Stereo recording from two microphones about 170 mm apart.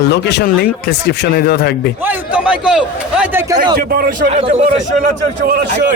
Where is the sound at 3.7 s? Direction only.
70° right (ahead or behind).